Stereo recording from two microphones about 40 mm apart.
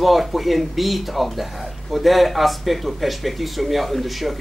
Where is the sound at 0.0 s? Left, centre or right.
Centre.